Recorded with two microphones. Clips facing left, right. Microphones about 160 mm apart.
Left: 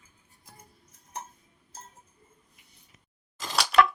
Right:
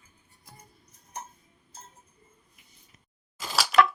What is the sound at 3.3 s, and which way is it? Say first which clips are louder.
Chopping: even; 5° right (ahead or behind).